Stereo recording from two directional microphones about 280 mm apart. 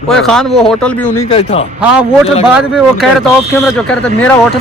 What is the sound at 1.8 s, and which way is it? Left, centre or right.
A man's voice, centre.